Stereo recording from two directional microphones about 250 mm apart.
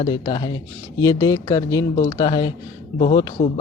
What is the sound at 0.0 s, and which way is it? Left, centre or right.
A man's voice, centre.